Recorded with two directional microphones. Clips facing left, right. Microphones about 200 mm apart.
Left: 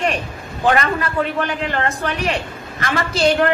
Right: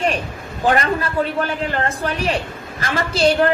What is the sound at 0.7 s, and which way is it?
A woman's voice, 35° right (ahead or behind).